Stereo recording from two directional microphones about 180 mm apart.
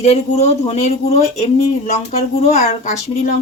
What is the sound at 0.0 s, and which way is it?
Speech, 40° left (ahead or behind).